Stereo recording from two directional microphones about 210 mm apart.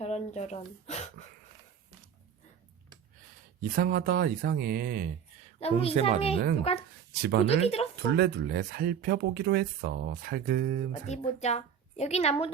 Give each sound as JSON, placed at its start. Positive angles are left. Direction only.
{"t": 0.3, "sound": "a woman's voice", "side_deg": 30}
{"t": 3.6, "sound": "speech", "side_deg": -40}
{"t": 5.5, "sound": "speech", "side_deg": 30}
{"t": 7.1, "sound": "speech", "side_deg": -50}
{"t": 7.4, "sound": "speech", "side_deg": 30}
{"t": 8.1, "sound": "speech", "side_deg": -50}
{"t": 11.0, "sound": "a woman's voice", "side_deg": 30}